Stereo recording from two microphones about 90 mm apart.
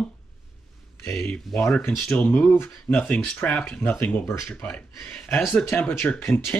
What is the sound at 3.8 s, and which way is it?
Speech, 25° left (ahead or behind).